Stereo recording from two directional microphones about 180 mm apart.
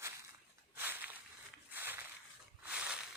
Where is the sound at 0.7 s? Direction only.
10° right (ahead or behind).